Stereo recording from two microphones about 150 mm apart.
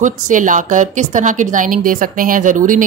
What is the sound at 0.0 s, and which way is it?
A woman's voice, 60° right (ahead or behind).